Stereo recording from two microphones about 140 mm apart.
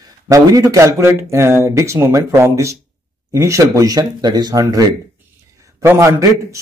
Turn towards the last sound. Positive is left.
turn(degrees=-20)  # may be behind; listen again after turning